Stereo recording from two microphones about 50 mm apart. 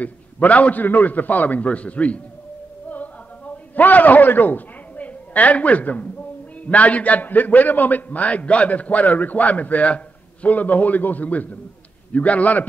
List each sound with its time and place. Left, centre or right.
0.0 s a man's voice: left
2.9 s a sound: left
6.6 s a man's voice: left